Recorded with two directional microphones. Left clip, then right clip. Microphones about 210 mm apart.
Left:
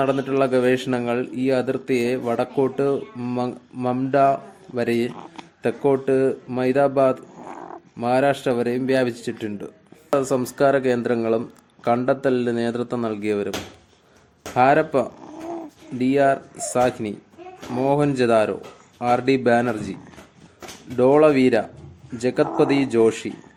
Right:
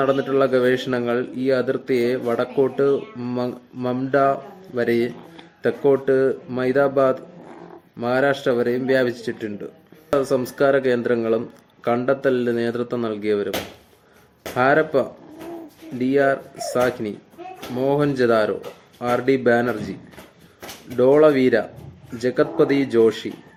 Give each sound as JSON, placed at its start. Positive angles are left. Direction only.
{"t": 0.0, "sound": "a man's voice", "side_deg": 35}
{"t": 14.5, "sound": "a man's voice", "side_deg": 35}